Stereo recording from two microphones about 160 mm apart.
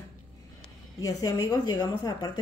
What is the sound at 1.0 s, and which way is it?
A woman's voice, 20° left (ahead or behind).